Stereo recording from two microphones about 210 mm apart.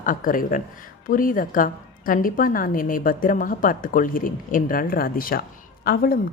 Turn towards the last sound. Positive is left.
turn(degrees=45)  # may be behind; listen again after turning